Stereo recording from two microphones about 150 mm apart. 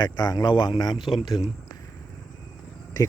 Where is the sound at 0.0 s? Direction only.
25° left (ahead or behind).